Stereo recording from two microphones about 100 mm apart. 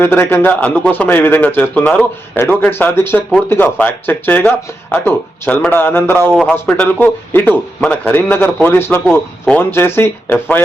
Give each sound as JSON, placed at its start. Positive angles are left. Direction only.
{"t": 0.0, "sound": "speech", "side_deg": 25}
{"t": 6.3, "sound": "a man's voice", "side_deg": 5}